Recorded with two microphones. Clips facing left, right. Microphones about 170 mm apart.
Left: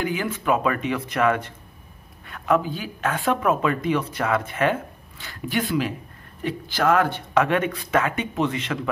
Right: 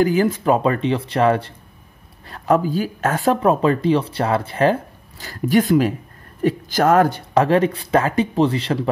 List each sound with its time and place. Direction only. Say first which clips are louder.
0.0 s speech: right 9 dB; 40° right (ahead or behind)